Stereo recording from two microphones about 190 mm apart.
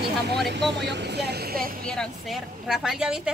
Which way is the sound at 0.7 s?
65° right (ahead or behind).